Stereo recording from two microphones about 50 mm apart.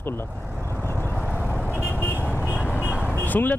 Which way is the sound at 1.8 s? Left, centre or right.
Left.